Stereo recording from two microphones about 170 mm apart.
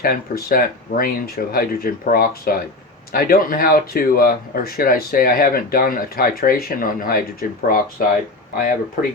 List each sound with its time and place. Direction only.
0.0 s speech: 60° left (ahead or behind)